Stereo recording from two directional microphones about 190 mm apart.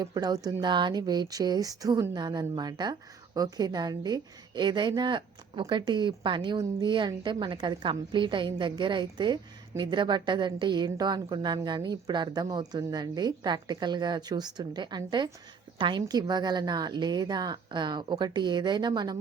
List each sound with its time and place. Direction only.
0.0 s a woman's voice: 20° right (ahead or behind)